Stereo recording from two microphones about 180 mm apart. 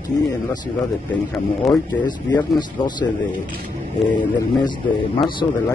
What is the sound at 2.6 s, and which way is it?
A man's voice, 25° left (ahead or behind).